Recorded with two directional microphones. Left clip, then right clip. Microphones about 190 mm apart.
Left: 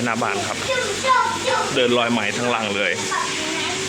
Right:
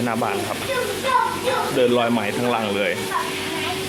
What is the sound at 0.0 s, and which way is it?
Speech, centre (ahead or behind).